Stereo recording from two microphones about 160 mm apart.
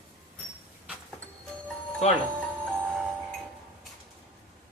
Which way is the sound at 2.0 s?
45° left (ahead or behind).